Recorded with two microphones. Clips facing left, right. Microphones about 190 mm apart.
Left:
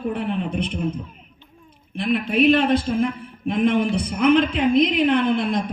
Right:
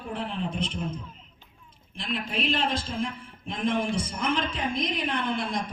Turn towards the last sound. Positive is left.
turn(degrees=60)  # may be behind; listen again after turning